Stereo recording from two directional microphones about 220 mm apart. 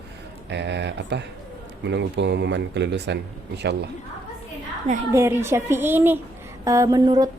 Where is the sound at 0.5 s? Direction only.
50° right (ahead or behind).